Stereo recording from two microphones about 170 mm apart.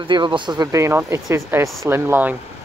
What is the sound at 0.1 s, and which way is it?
Speech, 25° right (ahead or behind).